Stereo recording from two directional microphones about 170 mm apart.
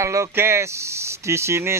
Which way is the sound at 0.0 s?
15° right (ahead or behind).